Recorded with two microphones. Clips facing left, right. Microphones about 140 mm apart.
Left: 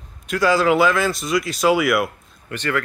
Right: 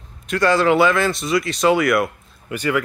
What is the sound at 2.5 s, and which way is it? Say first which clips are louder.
Speech: right 3 dB; 10° right (ahead or behind).